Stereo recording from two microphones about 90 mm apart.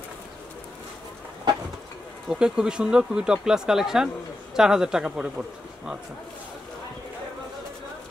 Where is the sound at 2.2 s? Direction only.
5° right (ahead or behind).